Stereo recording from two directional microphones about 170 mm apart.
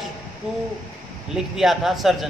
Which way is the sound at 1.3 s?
Centre (ahead or behind).